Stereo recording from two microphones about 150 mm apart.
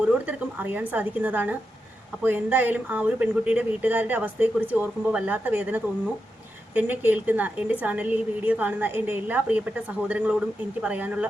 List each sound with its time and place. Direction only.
0.0 s speech: 10° right (ahead or behind)